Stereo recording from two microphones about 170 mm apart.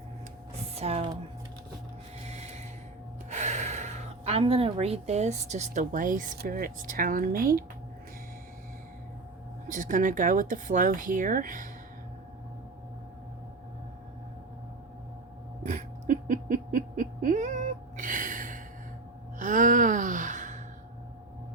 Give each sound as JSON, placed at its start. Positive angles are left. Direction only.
{"t": 0.8, "sound": "a sound", "side_deg": -35}
{"t": 2.2, "sound": "snort", "side_deg": -40}
{"t": 3.2, "sound": "a woman's voice", "side_deg": -45}
{"t": 9.6, "sound": "speech", "side_deg": -50}
{"t": 15.6, "sound": "a sound", "side_deg": -50}
{"t": 19.4, "sound": "gasp", "side_deg": -50}